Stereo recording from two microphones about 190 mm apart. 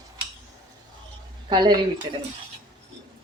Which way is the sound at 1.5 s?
25° right (ahead or behind).